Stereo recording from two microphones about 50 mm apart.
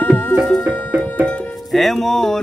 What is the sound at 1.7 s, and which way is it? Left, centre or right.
Speech, centre.